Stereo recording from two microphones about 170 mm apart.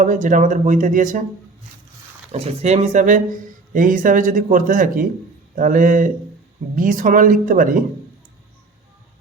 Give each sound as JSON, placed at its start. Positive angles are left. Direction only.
{"t": 0.0, "sound": "speech", "side_deg": -50}
{"t": 2.3, "sound": "speech", "side_deg": -40}